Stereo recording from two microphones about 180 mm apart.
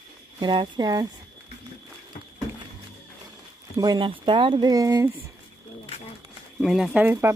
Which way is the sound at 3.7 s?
25° right (ahead or behind).